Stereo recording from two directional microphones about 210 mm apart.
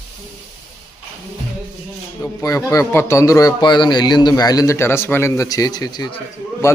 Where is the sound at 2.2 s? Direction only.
15° left (ahead or behind).